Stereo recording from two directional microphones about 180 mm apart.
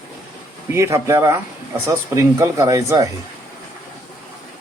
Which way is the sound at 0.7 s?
15° right (ahead or behind).